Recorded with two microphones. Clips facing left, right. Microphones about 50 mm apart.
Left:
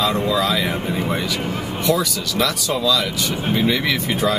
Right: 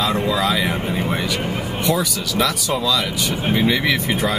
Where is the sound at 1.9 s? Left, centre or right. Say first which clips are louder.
Left 2 dB; centre.